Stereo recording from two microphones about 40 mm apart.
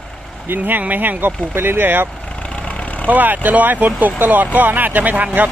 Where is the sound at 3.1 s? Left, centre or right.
Right.